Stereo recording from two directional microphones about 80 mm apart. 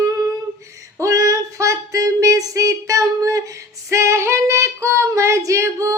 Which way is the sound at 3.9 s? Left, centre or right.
Right.